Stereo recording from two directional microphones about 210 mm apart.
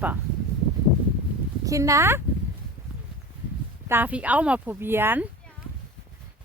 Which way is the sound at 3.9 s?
10° right (ahead or behind).